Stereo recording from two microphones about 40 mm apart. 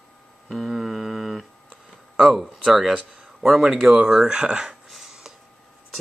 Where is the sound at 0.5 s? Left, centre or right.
Centre.